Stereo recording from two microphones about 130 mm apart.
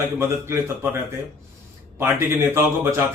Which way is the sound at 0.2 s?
20° right (ahead or behind).